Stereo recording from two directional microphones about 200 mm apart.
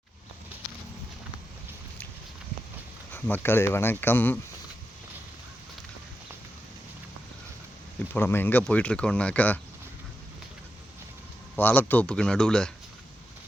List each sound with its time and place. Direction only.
3.1 s speech: 10° left (ahead or behind)
8.1 s speech: 10° left (ahead or behind)
11.5 s a man's voice: 10° left (ahead or behind)